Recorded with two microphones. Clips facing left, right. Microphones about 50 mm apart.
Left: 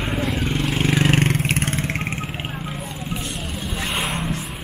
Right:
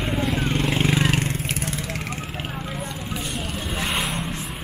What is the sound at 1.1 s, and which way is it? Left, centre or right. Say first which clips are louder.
Vehicle: left 5 dB; left.